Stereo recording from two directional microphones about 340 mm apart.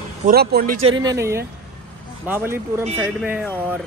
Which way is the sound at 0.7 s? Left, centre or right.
Right.